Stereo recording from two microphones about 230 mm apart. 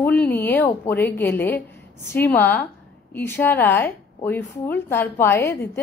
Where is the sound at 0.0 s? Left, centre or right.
Centre.